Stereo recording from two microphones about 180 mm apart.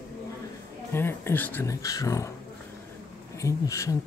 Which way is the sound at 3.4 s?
15° left (ahead or behind).